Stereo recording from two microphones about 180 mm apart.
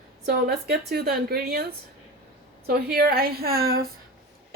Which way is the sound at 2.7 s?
60° right (ahead or behind).